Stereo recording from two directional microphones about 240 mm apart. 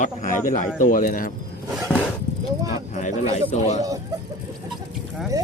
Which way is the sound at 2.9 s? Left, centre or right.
Left.